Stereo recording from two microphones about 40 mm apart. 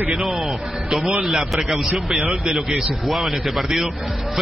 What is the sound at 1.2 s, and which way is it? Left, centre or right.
A man's voice, centre.